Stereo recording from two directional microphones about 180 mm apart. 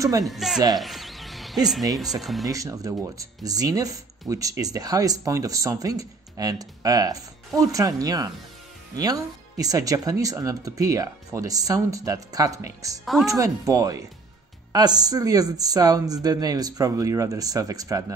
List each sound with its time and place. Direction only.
0.2 s speech: centre (ahead or behind)
0.7 s music: centre (ahead or behind)
2.2 s speech: centre (ahead or behind)
2.5 s speech: 20° right (ahead or behind)